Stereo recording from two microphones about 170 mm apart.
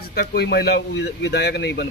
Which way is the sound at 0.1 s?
70° left (ahead or behind).